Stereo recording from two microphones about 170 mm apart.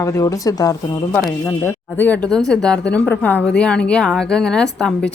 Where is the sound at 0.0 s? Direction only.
20° left (ahead or behind).